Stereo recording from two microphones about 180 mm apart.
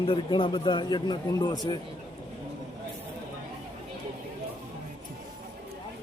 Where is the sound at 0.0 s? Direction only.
30° left (ahead or behind).